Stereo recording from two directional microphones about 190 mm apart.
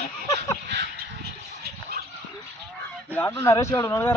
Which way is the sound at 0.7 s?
60° right (ahead or behind).